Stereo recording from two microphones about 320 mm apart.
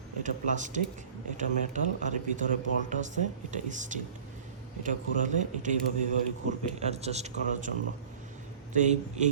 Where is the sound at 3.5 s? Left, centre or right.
Right.